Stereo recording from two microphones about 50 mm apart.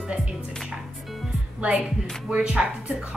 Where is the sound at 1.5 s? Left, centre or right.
Right.